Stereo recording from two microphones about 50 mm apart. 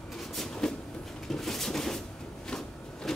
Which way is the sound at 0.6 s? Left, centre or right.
Centre.